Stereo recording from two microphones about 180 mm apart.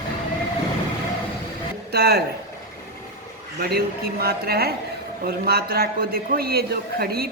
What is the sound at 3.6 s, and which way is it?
A man's voice, 60° right (ahead or behind).